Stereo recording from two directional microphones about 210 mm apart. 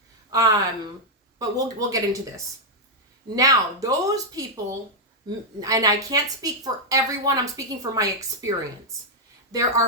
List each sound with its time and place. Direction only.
0.3 s a woman's voice: 20° right (ahead or behind)